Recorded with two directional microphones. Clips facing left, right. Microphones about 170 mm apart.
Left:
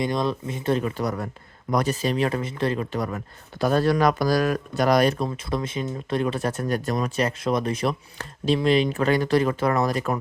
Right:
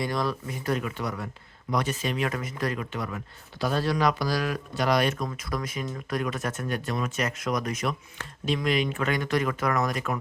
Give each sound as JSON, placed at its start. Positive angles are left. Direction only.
{"t": 0.0, "sound": "speech", "side_deg": 20}
{"t": 3.6, "sound": "speech", "side_deg": 50}